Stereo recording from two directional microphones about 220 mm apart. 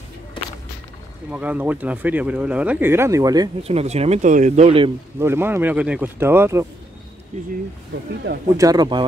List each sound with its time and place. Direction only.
1.3 s speech: 5° right (ahead or behind)
3.6 s speech: 30° right (ahead or behind)
5.2 s speech: 10° right (ahead or behind)
8.5 s speech: 15° right (ahead or behind)